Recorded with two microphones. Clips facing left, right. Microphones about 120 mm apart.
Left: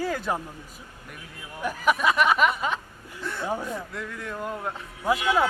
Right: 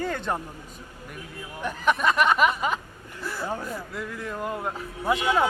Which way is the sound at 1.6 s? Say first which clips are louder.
Even; 5° left (ahead or behind).